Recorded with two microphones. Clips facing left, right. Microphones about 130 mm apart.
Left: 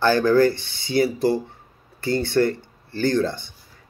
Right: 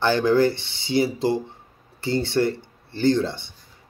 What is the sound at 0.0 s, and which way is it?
Speech, 20° right (ahead or behind).